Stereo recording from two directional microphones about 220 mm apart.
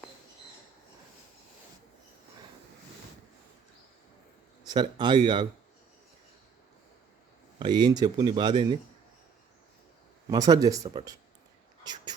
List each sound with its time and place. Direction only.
4.6 s speech: 20° right (ahead or behind)
7.6 s speech: 20° right (ahead or behind)
10.2 s speech: 15° right (ahead or behind)
11.8 s a sound: 20° right (ahead or behind)